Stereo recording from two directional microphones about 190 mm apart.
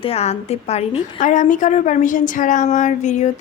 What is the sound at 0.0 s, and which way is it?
A woman's voice, 30° left (ahead or behind).